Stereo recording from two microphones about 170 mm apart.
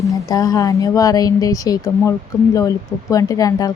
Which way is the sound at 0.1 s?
20° left (ahead or behind).